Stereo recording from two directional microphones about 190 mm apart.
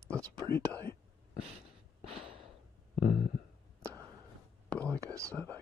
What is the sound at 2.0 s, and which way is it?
Gasp, 30° right (ahead or behind).